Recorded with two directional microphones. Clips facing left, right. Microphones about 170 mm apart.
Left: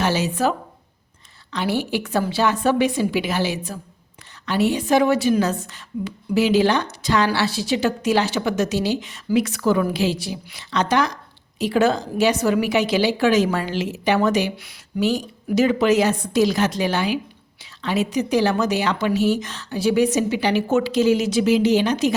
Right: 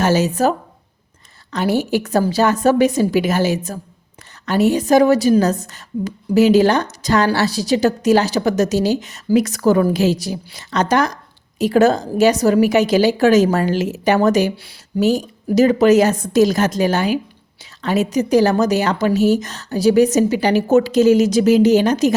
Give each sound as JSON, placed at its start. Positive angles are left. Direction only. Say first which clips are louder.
{"t": 0.0, "sound": "a woman's voice", "louder": "right 5 dB", "side_deg": -45}
{"t": 1.5, "sound": "a woman's voice", "louder": "right 5 dB", "side_deg": -45}